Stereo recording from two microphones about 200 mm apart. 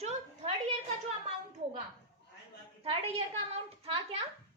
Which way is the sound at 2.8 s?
30° right (ahead or behind).